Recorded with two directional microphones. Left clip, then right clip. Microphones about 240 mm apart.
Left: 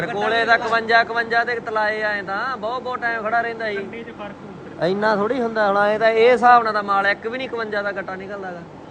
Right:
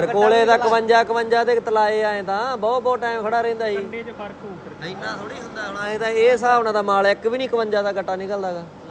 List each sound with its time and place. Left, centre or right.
0.0 s a man's voice: right
5.0 s speech: centre
5.8 s a man's voice: centre